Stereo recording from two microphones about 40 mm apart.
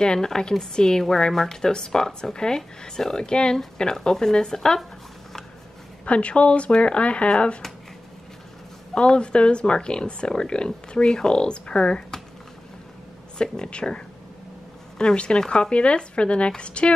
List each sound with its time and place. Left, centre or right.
0.0 s a woman's voice: centre
6.0 s speech: left
8.9 s speech: left
13.4 s speech: left